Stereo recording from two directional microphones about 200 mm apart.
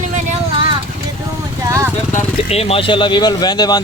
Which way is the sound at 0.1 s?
30° right (ahead or behind).